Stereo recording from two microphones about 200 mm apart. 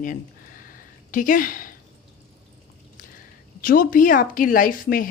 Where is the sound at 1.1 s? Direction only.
40° left (ahead or behind).